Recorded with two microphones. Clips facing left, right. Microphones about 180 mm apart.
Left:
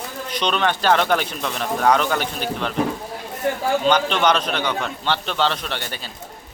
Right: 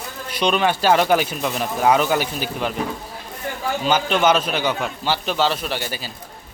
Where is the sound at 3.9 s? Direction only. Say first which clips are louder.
Right 2 dB; 5° right (ahead or behind).